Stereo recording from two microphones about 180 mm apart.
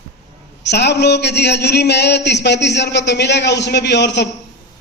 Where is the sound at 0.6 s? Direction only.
70° left (ahead or behind).